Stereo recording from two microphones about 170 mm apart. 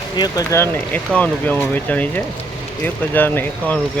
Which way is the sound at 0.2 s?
20° left (ahead or behind).